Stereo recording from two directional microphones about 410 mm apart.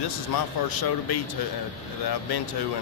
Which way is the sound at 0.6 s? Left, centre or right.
Left.